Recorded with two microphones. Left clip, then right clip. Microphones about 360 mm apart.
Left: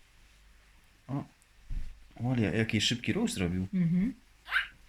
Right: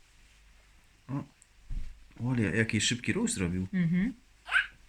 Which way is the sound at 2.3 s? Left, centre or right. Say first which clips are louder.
Right 1 dB; centre.